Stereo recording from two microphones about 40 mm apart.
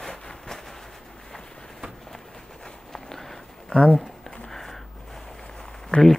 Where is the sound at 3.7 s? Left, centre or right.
Left.